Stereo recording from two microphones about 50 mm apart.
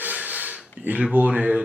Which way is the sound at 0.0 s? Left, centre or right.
Right.